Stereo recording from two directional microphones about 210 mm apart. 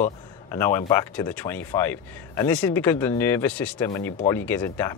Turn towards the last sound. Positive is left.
turn(degrees=10)  # may be behind; listen again after turning